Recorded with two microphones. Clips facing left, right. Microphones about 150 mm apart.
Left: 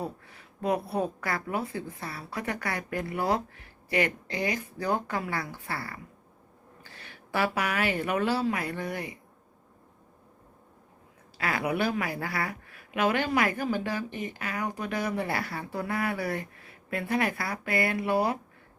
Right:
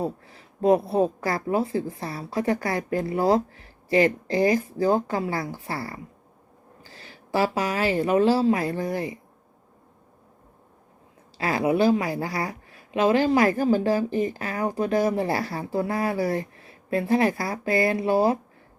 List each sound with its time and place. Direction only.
0.3 s a woman's voice: 30° right (ahead or behind)
11.3 s a woman's voice: 25° right (ahead or behind)